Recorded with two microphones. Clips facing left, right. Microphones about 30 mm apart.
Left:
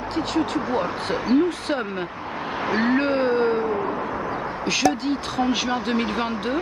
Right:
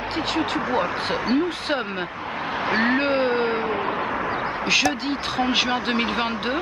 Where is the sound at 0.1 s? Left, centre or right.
Right.